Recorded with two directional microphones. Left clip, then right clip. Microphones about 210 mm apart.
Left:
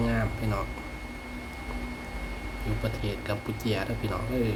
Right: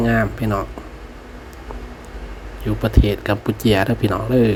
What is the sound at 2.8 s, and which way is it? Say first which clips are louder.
Speech: right 15 dB; 35° right (ahead or behind).